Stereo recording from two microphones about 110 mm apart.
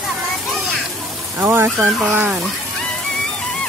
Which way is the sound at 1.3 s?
15° right (ahead or behind).